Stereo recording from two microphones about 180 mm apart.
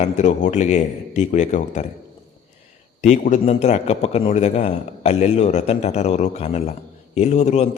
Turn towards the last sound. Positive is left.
turn(degrees=40)  # may be behind; listen again after turning